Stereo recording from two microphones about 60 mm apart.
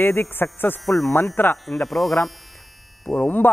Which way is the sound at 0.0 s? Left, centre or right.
Left.